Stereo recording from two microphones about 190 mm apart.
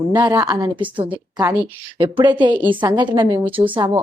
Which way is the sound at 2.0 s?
25° right (ahead or behind).